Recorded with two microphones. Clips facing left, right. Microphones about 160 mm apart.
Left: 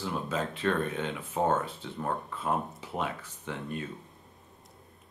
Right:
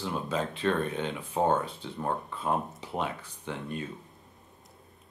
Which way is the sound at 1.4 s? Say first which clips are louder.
Right 2 dB; 20° right (ahead or behind).